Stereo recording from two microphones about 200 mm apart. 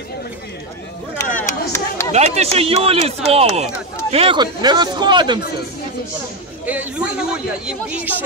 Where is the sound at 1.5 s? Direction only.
10° left (ahead or behind).